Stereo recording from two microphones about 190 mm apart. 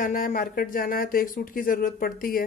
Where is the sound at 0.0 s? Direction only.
45° left (ahead or behind).